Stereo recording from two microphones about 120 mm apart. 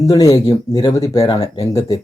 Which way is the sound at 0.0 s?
30° left (ahead or behind).